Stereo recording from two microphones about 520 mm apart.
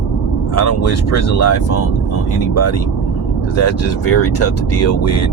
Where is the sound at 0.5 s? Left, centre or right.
Left.